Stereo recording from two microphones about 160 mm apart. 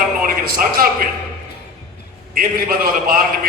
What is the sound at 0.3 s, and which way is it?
Speech, 65° right (ahead or behind).